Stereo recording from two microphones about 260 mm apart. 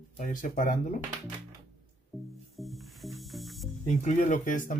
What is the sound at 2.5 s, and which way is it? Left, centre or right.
Snake, centre.